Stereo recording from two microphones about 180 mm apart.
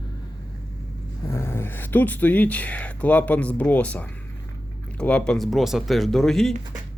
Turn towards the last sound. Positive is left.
turn(degrees=0)  # may be behind; listen again after turning